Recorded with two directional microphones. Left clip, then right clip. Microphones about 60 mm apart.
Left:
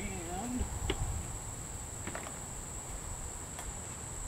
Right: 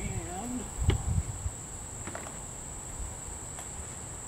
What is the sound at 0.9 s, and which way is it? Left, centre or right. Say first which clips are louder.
Insect: right 2 dB; centre.